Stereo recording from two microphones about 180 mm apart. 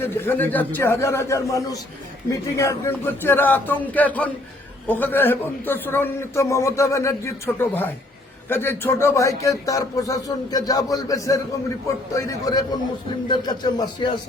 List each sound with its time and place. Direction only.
0.0 s a man's voice: 10° left (ahead or behind)